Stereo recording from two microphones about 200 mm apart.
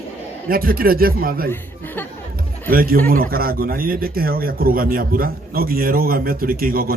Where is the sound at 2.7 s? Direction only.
45° right (ahead or behind).